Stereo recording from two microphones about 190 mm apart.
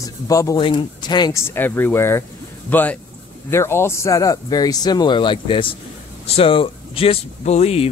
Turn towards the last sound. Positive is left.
turn(degrees=35)  # may be behind; listen again after turning